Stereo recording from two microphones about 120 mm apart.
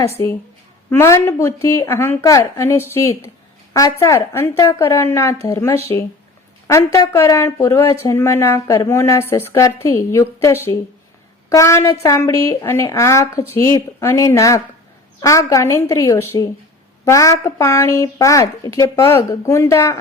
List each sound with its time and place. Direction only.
0.9 s a woman's voice: 20° left (ahead or behind)